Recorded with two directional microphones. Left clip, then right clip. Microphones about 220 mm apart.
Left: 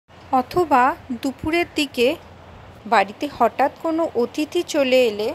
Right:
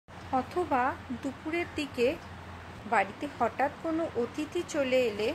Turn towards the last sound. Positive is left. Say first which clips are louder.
# left 10 dB
turn(degrees=35)  # may be behind; listen again after turning